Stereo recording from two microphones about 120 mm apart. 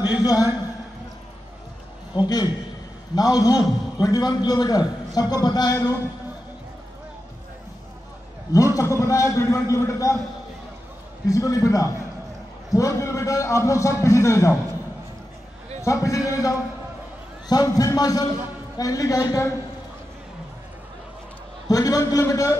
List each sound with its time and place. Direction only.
0.0 s a man's voice: 35° left (ahead or behind)
2.1 s a man's voice: 35° left (ahead or behind)
8.7 s a man's voice: 25° left (ahead or behind)
11.2 s a man's voice: 30° left (ahead or behind)
15.8 s a man's voice: 25° left (ahead or behind)
21.6 s a man's voice: 30° left (ahead or behind)